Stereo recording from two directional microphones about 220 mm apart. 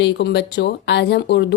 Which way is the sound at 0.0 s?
50° left (ahead or behind).